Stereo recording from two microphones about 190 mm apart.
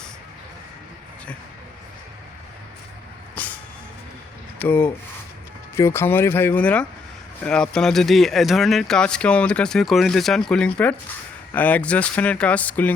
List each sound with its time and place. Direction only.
3.3 s vehicle: 10° left (ahead or behind)
4.6 s speech: 10° left (ahead or behind)